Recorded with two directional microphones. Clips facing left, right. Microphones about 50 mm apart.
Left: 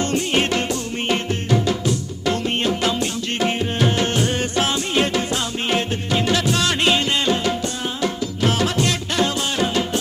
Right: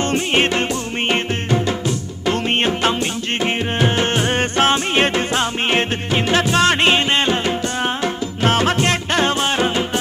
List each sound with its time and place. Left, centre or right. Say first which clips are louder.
0.0 s music: right 3 dB; right
2.3 s music: right 3 dB; right